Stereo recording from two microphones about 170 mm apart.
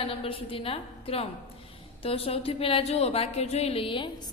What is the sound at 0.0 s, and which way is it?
A woman's voice, 30° left (ahead or behind).